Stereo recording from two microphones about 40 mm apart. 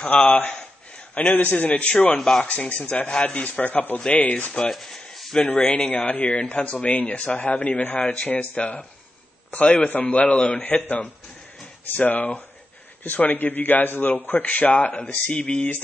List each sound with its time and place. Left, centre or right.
0.0 s speech: left
0.6 s a sound: left
2.4 s a man's voice: left
4.8 s a sound: centre
5.4 s a man's voice: left
8.0 s speech: left
8.3 s a man's voice: left